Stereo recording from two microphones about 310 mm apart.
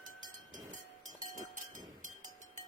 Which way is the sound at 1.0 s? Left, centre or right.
Right.